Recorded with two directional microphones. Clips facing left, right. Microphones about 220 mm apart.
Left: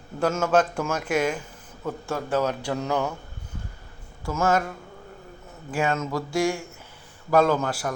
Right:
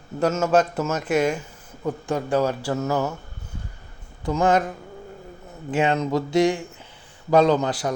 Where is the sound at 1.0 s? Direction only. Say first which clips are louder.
Right 3 dB; 10° left (ahead or behind).